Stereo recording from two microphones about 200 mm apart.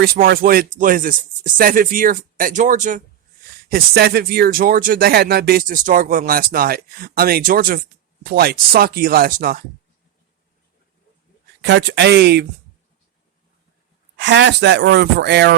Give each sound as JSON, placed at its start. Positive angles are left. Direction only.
{"t": 0.0, "sound": "speech", "side_deg": -50}
{"t": 3.7, "sound": "speech", "side_deg": -50}
{"t": 11.6, "sound": "speech", "side_deg": -60}
{"t": 14.2, "sound": "speech", "side_deg": -60}